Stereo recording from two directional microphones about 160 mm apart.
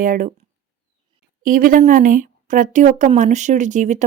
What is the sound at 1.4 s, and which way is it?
A woman's voice, 55° right (ahead or behind).